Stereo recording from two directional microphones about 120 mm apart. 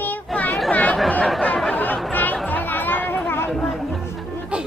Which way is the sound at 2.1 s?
15° left (ahead or behind).